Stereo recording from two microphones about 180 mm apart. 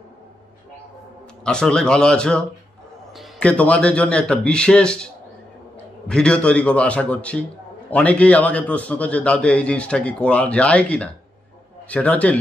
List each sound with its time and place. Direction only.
1.4 s a man's voice: 5° left (ahead or behind)